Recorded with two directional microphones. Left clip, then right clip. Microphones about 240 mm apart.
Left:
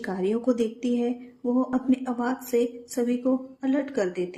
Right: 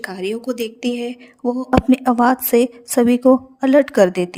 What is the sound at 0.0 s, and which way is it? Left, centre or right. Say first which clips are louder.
A woman's voice: right 2 dB; right.